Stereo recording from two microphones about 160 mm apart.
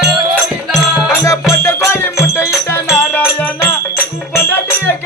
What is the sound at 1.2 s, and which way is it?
Music, 20° left (ahead or behind).